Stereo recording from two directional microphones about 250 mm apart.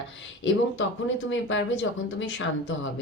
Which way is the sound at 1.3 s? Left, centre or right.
Left.